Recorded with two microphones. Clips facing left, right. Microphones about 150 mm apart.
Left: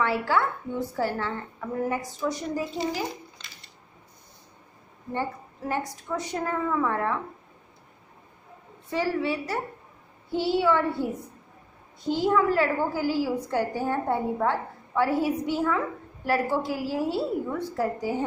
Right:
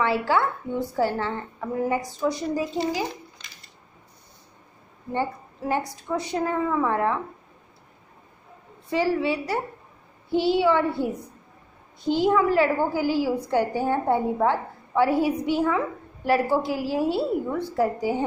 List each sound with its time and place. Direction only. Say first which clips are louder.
0.0 s a woman's voice: right 2 dB; 20° right (ahead or behind)
2.5 s a woman's voice: right 3 dB; 15° right (ahead or behind)
5.1 s a woman's voice: right 3 dB; 15° right (ahead or behind)
8.9 s a woman's voice: right 3 dB; 15° right (ahead or behind)
12.1 s a woman's voice: right 2 dB; 15° right (ahead or behind)